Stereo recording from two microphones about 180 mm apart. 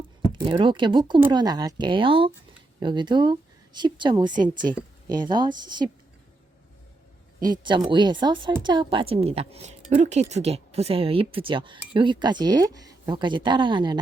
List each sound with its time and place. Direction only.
0.2 s speech: 30° right (ahead or behind)
7.4 s a woman's voice: 25° right (ahead or behind)